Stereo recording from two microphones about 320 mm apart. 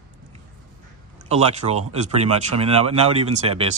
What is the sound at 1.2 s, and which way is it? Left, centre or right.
Speech, centre.